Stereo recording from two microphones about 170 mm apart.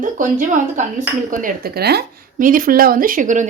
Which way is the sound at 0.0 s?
50° right (ahead or behind).